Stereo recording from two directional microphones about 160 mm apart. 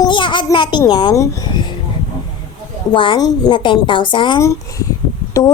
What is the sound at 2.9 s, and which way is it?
A woman's voice, 30° left (ahead or behind).